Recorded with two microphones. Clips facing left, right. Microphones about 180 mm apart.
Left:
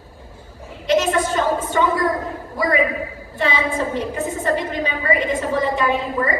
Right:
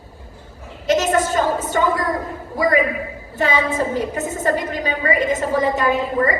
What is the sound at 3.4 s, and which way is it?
A woman's voice, 45° right (ahead or behind).